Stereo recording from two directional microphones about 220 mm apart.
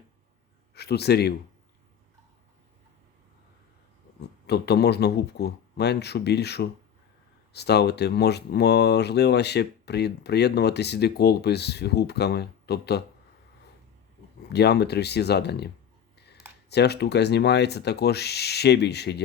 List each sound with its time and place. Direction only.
0.7 s speech: 45° left (ahead or behind)
4.4 s speech: 50° left (ahead or behind)
14.5 s speech: 50° left (ahead or behind)
16.1 s a sound: 50° left (ahead or behind)
16.6 s speech: 50° left (ahead or behind)